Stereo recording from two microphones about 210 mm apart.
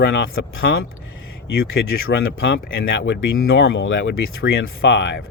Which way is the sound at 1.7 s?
55° left (ahead or behind).